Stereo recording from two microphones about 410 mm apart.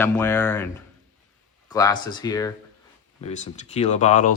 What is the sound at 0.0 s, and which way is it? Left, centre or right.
Speech, centre.